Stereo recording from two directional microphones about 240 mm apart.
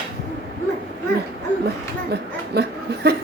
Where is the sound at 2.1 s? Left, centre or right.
Right.